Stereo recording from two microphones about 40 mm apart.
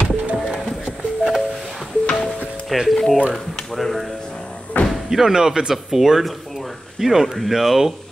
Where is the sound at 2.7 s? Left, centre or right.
Centre.